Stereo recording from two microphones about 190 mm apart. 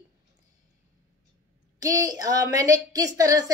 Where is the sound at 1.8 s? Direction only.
20° right (ahead or behind).